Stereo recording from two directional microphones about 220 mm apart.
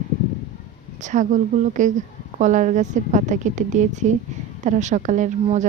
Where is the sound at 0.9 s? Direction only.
35° right (ahead or behind).